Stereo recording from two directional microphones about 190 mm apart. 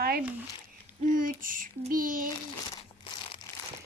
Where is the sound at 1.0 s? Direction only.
45° right (ahead or behind).